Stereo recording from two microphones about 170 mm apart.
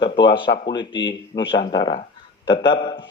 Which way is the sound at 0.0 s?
25° left (ahead or behind).